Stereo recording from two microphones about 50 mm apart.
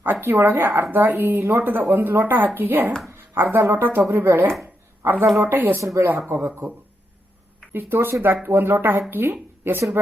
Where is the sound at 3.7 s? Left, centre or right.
Right.